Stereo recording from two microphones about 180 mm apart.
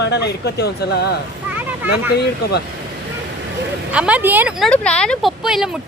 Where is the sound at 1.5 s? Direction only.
10° right (ahead or behind).